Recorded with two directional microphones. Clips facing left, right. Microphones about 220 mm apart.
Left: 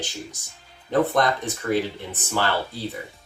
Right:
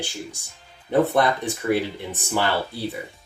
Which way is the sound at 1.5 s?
15° right (ahead or behind).